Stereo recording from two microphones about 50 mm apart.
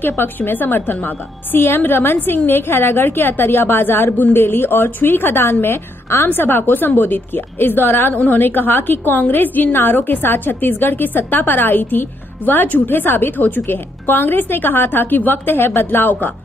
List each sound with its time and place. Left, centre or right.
0.0 s a woman's voice: left
6.2 s a woman's voice: left